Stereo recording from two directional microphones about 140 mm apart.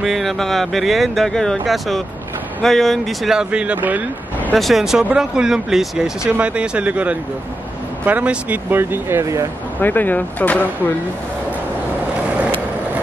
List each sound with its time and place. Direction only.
0.0 s speech: centre (ahead or behind)
4.6 s speech: centre (ahead or behind); by 9.5 s 20° right (ahead or behind)
9.8 s speech: 15° left (ahead or behind)